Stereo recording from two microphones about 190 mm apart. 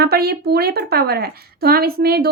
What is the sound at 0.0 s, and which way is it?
Speech, 55° right (ahead or behind).